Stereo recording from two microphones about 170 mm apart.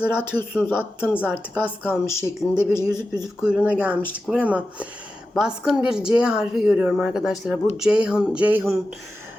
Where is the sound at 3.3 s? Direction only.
5° right (ahead or behind).